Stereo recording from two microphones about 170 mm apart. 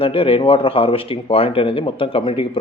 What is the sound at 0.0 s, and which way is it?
A man's voice, 35° left (ahead or behind).